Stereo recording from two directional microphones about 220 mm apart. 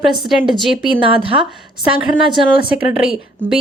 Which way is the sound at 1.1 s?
25° right (ahead or behind).